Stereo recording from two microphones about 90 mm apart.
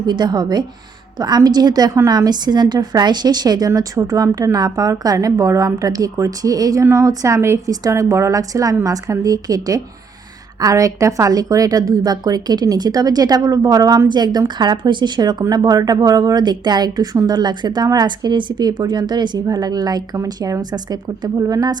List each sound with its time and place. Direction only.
0.0 s a woman's voice: 55° right (ahead or behind)
3.8 s a woman's voice: 40° right (ahead or behind)